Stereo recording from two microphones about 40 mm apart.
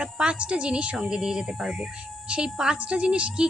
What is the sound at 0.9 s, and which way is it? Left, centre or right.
Speech, centre.